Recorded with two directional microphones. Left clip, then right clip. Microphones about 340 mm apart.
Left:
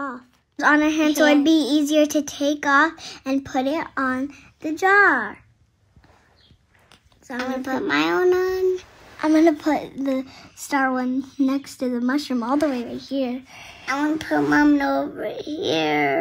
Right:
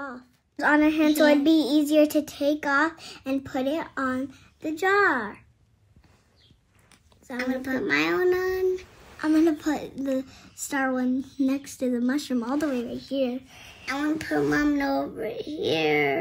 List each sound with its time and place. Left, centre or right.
0.0 s a woman's voice: left
6.9 s a child's voice: centre
13.9 s a child's voice: centre